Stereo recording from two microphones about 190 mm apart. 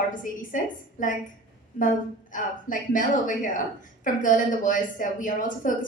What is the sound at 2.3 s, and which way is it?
A woman's voice, 45° left (ahead or behind).